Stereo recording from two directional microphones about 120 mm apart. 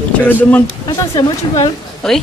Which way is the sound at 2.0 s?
5° left (ahead or behind).